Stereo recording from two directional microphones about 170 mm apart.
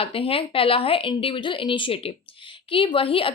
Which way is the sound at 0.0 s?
35° left (ahead or behind).